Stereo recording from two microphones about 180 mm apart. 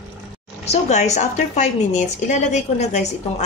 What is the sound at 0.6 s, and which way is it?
Speech, 40° left (ahead or behind).